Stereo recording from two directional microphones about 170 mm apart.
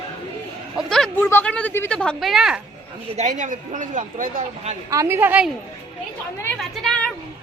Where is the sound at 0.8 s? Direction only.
5° left (ahead or behind).